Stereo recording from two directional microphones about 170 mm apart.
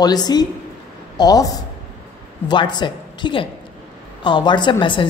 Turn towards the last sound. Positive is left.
turn(degrees=30)  # may be behind; listen again after turning